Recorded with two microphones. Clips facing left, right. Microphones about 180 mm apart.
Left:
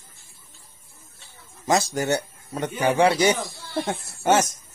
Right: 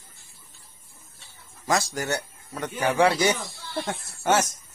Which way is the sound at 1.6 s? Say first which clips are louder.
Left 4 dB; 20° left (ahead or behind).